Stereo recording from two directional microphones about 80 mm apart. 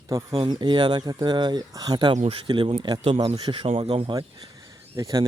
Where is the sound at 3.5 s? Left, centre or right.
Right.